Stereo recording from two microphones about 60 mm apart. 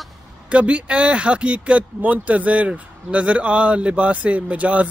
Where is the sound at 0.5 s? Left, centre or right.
Right.